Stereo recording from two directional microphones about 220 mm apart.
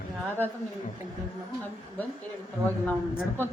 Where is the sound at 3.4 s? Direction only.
10° left (ahead or behind).